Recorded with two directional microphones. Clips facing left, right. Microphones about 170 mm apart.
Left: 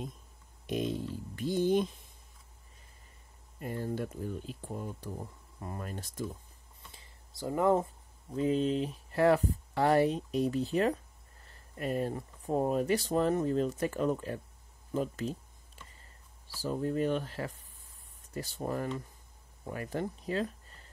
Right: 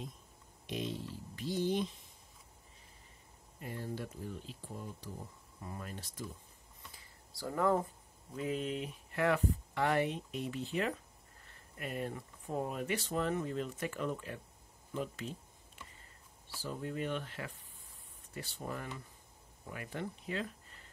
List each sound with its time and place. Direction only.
0.7 s speech: 50° left (ahead or behind)
3.5 s speech: 50° left (ahead or behind)
6.9 s a sound: 20° left (ahead or behind)
8.4 s speech: 30° left (ahead or behind)
16.6 s speech: 40° left (ahead or behind)